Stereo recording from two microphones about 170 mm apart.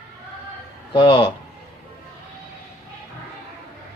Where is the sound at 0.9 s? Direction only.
30° left (ahead or behind).